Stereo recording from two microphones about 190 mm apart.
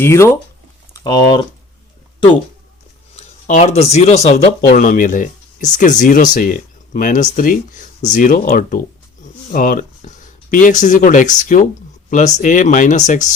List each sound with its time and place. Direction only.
0.0 s speech: 15° left (ahead or behind)
3.2 s a sound: 40° left (ahead or behind)
3.9 s speech: 35° left (ahead or behind)